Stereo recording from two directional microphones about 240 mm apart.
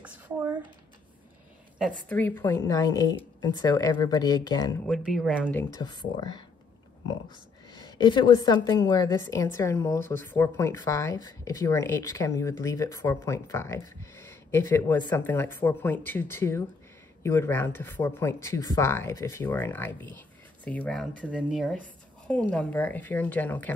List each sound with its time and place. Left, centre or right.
0.0 s a sound: centre
2.0 s speech: centre
4.8 s speech: centre
8.0 s a woman's voice: centre